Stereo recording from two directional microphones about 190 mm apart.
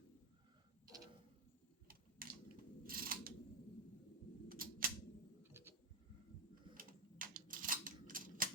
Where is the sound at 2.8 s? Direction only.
50° right (ahead or behind).